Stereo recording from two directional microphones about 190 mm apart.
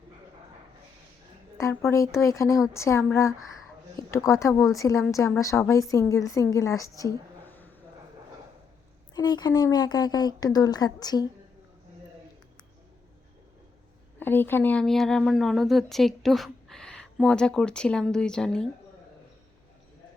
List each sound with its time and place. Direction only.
1.5 s a woman's voice: 15° left (ahead or behind)
9.1 s speech: 20° left (ahead or behind)
14.2 s speech: 10° left (ahead or behind)